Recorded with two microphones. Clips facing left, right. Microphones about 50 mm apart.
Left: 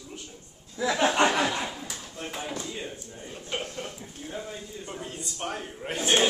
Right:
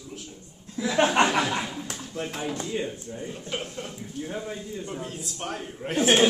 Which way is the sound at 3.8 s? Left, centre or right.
Centre.